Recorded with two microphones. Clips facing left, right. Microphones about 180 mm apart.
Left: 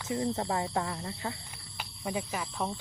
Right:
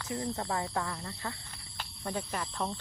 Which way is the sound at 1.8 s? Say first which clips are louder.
Left 2 dB; 10° left (ahead or behind).